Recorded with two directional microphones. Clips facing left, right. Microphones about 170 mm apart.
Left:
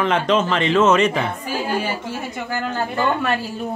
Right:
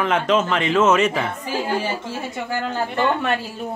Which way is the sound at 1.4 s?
25° right (ahead or behind).